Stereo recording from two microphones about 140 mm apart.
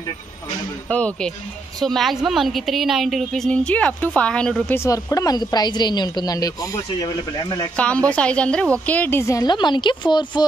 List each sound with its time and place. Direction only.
0.8 s a woman's voice: 10° left (ahead or behind)
4.7 s speech: 25° left (ahead or behind)
7.7 s a woman's voice: 10° left (ahead or behind); by 10.4 s 30° left (ahead or behind)